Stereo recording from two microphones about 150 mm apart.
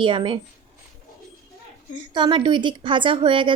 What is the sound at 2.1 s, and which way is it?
Speech, 30° right (ahead or behind).